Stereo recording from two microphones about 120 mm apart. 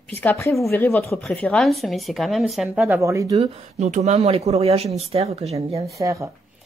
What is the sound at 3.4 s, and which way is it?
Speech, 70° right (ahead or behind).